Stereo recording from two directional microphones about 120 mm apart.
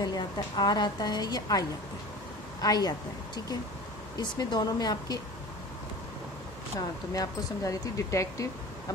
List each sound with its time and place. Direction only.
0.0 s a woman's voice: 35° left (ahead or behind)
4.2 s a woman's voice: 35° left (ahead or behind)
7.2 s speech: 30° left (ahead or behind)